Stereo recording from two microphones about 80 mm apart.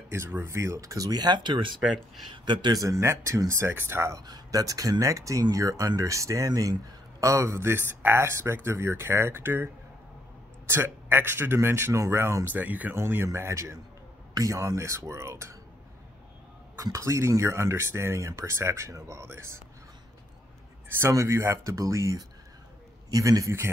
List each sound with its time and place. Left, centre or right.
0.1 s speech: right
2.7 s a man's voice: right
4.3 s a man's voice: right
10.7 s a man's voice: right
12.5 s speech: right
12.9 s a man's voice: right
16.7 s a man's voice: right
21.1 s a man's voice: right